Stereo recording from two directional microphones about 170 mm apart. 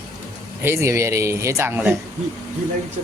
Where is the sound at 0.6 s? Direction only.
15° right (ahead or behind).